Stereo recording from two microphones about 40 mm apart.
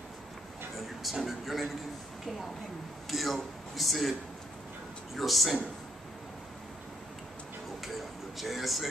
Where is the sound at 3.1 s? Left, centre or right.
Centre.